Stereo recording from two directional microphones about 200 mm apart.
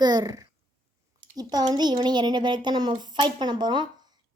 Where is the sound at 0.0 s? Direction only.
20° right (ahead or behind).